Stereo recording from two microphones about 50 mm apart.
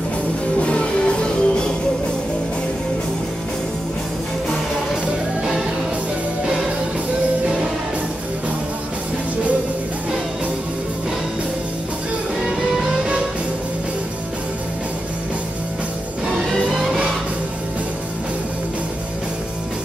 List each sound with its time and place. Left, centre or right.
0.6 s music: left